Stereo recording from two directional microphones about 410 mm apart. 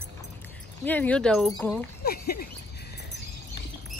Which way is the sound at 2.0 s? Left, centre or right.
Left.